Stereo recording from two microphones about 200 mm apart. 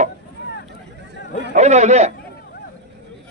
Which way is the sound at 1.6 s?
35° right (ahead or behind).